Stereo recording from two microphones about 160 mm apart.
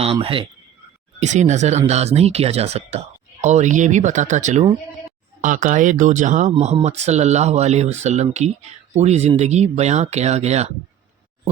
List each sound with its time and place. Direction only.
0.0 s speech: 35° right (ahead or behind)
1.2 s speech: 45° right (ahead or behind)